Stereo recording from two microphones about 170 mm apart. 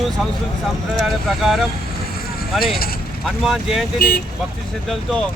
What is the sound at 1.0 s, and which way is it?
Speech, centre (ahead or behind).